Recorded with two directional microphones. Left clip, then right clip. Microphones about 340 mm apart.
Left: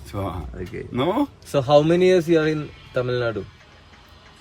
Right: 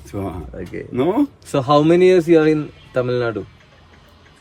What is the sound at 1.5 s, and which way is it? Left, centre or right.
A man's voice, centre.